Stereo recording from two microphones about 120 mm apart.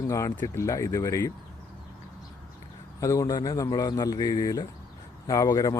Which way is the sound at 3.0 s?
30° left (ahead or behind).